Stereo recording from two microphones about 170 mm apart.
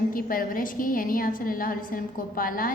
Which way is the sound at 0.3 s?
55° left (ahead or behind).